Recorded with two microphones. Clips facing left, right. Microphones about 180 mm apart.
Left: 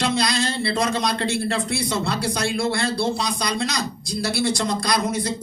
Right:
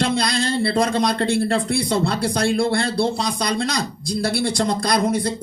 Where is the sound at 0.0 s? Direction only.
55° right (ahead or behind).